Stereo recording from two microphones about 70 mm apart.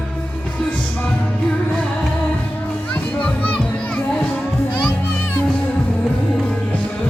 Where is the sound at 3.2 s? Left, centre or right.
Centre.